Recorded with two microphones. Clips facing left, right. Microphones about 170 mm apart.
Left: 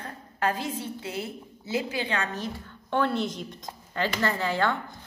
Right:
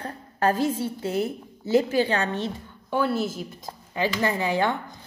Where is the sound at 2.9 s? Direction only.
5° right (ahead or behind).